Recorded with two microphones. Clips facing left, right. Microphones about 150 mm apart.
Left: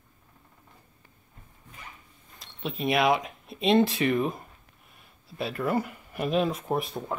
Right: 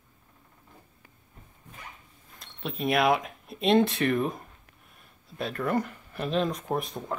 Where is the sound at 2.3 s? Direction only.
Centre (ahead or behind).